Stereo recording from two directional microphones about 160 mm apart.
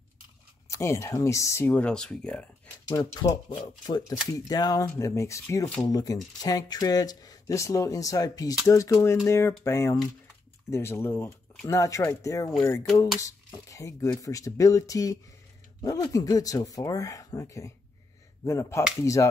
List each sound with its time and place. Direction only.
0.7 s speech: 15° left (ahead or behind)
2.9 s speech: 25° left (ahead or behind)